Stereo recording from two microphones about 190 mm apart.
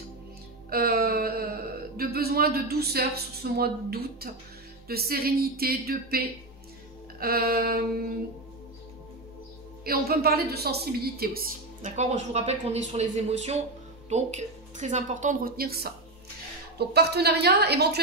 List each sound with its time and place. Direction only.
0.7 s a sound: 50° right (ahead or behind)
4.8 s a woman's voice: 55° right (ahead or behind)
9.8 s a woman's voice: 55° right (ahead or behind)
11.9 s a woman's voice: 35° right (ahead or behind); by 18.0 s 60° right (ahead or behind)